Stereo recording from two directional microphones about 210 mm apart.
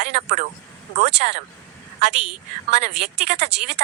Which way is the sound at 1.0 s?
50° right (ahead or behind).